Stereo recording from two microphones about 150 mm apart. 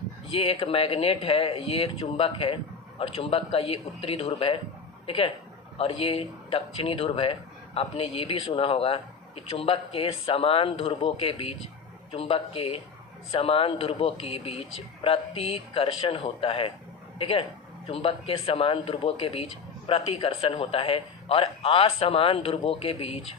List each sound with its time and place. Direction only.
0.3 s speech: 40° left (ahead or behind)